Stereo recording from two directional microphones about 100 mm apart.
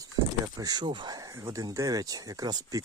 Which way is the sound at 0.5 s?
40° right (ahead or behind).